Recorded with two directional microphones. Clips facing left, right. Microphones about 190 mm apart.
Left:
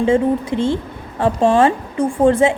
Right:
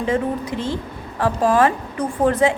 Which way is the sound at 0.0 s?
25° left (ahead or behind).